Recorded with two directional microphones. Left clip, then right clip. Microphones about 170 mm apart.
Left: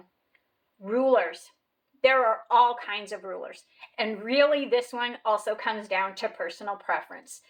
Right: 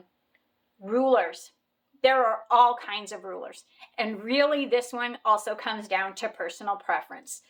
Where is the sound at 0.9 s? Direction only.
20° right (ahead or behind).